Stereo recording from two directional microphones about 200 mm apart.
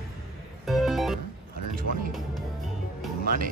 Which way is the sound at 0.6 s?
Centre (ahead or behind).